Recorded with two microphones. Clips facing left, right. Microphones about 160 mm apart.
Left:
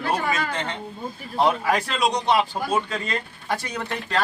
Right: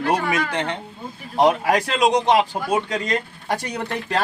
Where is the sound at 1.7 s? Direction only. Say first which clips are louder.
Right 4 dB; 40° right (ahead or behind).